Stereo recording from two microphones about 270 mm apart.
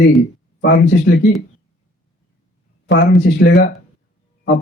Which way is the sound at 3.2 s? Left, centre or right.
Left.